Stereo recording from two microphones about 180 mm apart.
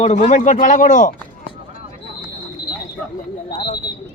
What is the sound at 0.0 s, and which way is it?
Speech, 40° left (ahead or behind).